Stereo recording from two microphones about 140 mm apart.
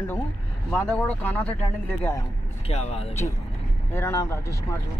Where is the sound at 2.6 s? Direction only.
50° left (ahead or behind).